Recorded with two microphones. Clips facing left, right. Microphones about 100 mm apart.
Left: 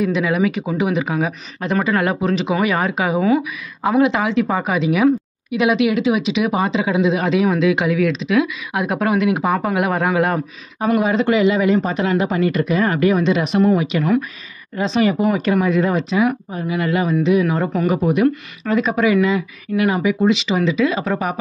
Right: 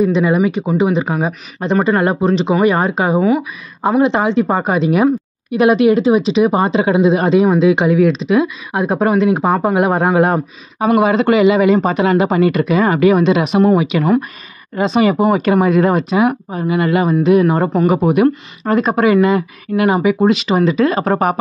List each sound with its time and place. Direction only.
0.0 s speech: 30° right (ahead or behind)
10.9 s speech: 60° right (ahead or behind)
13.9 s speech: 90° right
14.8 s speech: 60° right (ahead or behind)
17.1 s speech: 45° right (ahead or behind)
17.8 s speech: 70° right (ahead or behind)
18.6 s speech: 40° right (ahead or behind)
19.8 s speech: 65° right (ahead or behind)
20.2 s speech: 45° right (ahead or behind)